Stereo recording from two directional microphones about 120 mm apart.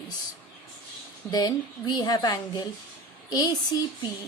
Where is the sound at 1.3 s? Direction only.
35° left (ahead or behind).